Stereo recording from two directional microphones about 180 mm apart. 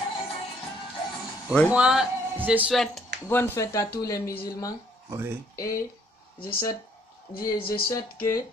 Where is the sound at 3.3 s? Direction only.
15° left (ahead or behind).